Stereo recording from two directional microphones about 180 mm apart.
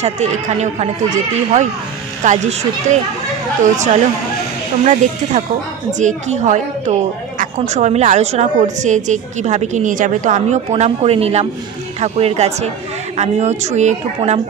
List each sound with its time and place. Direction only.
0.0 s a woman's voice: 40° right (ahead or behind)